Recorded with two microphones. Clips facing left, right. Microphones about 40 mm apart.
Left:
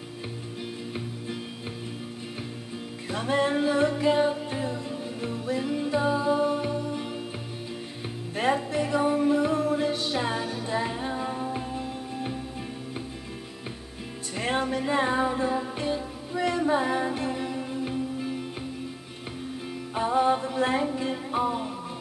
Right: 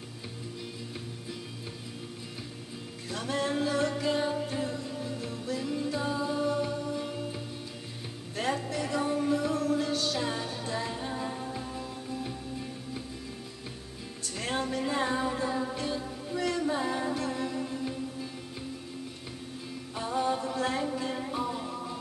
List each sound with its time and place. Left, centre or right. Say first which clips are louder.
3.1 s music: left 6 dB; left
8.4 s music: left 6 dB; left
10.4 s music: left 4 dB; centre
10.7 s music: left 6 dB; left
14.3 s music: left 5 dB; left
19.9 s music: left 7 dB; left